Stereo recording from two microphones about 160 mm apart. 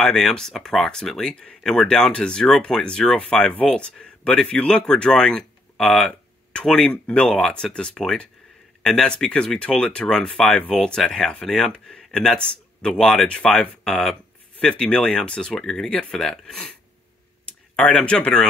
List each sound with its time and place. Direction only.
0.0 s speech: 5° left (ahead or behind)
17.7 s speech: 10° left (ahead or behind)